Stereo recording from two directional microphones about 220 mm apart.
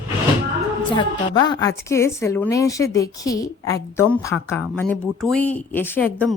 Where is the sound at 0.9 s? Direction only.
20° left (ahead or behind).